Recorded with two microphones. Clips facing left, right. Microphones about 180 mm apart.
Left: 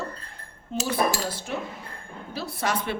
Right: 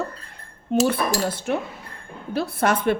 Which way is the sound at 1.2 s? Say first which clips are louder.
Right 6 dB; 55° right (ahead or behind).